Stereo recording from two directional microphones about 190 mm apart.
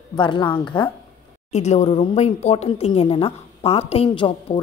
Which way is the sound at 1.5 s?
35° left (ahead or behind).